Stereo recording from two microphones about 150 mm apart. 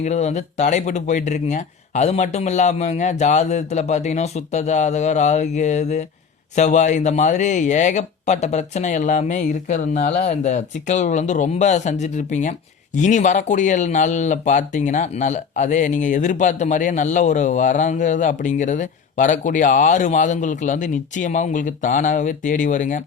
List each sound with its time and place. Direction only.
0.0 s speech: 50° left (ahead or behind)